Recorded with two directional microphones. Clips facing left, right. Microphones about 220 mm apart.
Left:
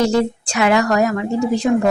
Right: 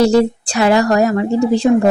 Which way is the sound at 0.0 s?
35° right (ahead or behind).